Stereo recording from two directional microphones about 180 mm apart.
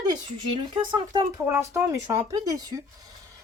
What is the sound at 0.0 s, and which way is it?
Speech, 25° right (ahead or behind).